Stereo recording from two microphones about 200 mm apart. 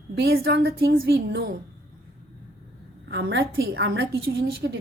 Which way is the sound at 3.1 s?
60° right (ahead or behind).